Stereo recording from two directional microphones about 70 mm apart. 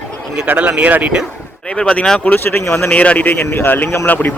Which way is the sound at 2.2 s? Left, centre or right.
Left.